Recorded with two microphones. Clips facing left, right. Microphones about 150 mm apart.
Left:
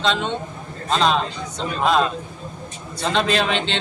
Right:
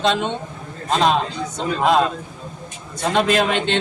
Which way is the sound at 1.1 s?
50° right (ahead or behind).